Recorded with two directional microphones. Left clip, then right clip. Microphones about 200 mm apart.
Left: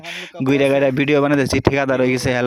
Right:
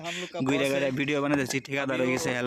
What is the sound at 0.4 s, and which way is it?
Speech, 45° left (ahead or behind).